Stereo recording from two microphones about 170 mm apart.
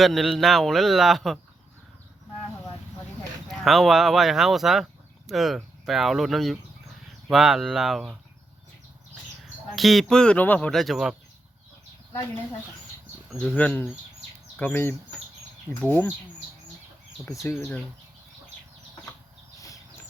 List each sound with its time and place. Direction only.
0.0 s speech: centre (ahead or behind)
3.6 s speech: centre (ahead or behind)
9.7 s speech: centre (ahead or behind)
13.6 s speech: 10° left (ahead or behind)
17.4 s speech: 15° left (ahead or behind)
19.5 s a sound: 20° left (ahead or behind)